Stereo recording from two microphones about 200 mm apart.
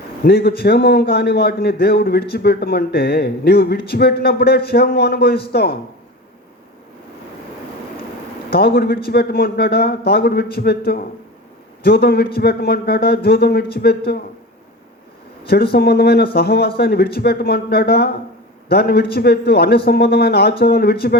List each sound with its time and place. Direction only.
0.3 s a man's voice: 50° left (ahead or behind)
8.5 s a man's voice: 50° left (ahead or behind)
15.7 s a man's voice: 50° left (ahead or behind)